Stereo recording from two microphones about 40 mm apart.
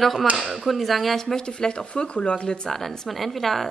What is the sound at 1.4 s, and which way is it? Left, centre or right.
Speech, left.